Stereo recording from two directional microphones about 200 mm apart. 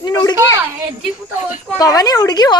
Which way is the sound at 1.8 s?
20° left (ahead or behind).